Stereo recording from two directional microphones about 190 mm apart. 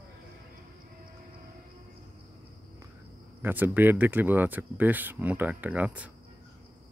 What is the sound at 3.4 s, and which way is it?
Speech, 10° right (ahead or behind).